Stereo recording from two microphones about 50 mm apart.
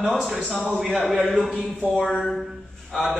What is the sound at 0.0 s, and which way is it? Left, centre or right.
A woman's voice, centre.